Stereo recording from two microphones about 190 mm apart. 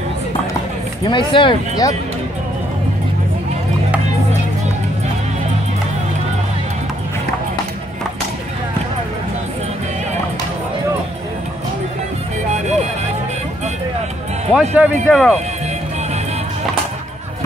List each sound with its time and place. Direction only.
1.0 s speech: 25° left (ahead or behind)
12.4 s music: 35° right (ahead or behind)
14.5 s speech: centre (ahead or behind)